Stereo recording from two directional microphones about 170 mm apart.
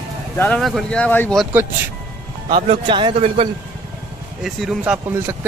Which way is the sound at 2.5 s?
30° right (ahead or behind).